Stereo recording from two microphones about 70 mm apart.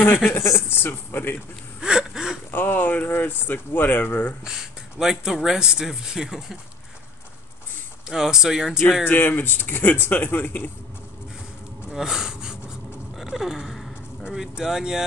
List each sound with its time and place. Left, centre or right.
0.3 s speech: left
1.8 s a sound: centre
2.5 s speech: left
4.5 s speech: centre
8.1 s speech: centre
9.0 s speech: left
11.9 s a sound: centre
13.2 s speech: centre